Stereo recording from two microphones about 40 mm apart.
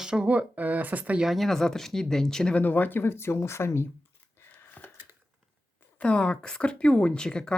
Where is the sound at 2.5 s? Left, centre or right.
Left.